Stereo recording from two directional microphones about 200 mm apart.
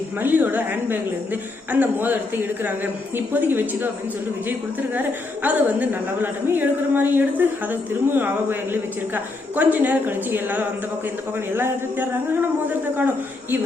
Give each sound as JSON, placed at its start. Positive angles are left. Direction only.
{"t": 0.2, "sound": "a woman's voice", "side_deg": -10}